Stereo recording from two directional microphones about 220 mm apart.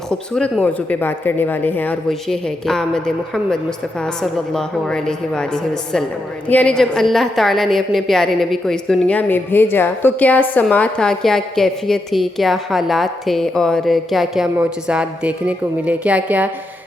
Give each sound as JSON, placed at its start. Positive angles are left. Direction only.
{"t": 0.1, "sound": "a woman's voice", "side_deg": 5}
{"t": 6.5, "sound": "a woman's voice", "side_deg": 5}